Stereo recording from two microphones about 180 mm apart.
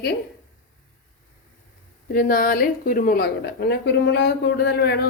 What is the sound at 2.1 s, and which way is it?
A woman's voice, 50° left (ahead or behind).